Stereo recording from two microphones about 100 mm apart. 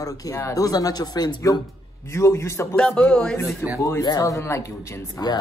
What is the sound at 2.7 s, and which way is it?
Speech, 10° left (ahead or behind).